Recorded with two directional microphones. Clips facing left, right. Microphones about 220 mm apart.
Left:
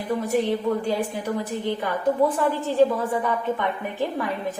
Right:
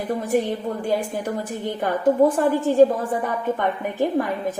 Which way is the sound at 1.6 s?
45° right (ahead or behind).